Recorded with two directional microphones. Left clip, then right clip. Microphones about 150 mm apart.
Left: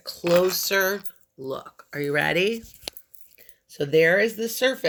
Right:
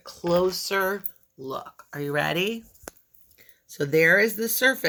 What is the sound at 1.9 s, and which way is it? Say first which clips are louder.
Speech: left 3 dB; 15° right (ahead or behind).